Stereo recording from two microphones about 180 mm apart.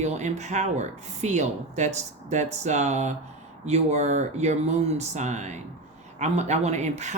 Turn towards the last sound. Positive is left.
turn(degrees=-40)  # may be behind; listen again after turning